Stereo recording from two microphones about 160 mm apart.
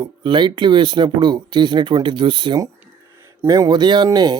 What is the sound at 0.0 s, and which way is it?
Speech, 30° right (ahead or behind).